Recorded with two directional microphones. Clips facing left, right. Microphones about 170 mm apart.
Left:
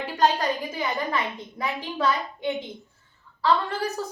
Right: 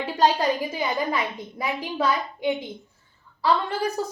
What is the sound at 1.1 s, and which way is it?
Speech, 15° right (ahead or behind).